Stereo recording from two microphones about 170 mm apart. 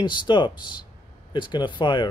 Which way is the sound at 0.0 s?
25° left (ahead or behind).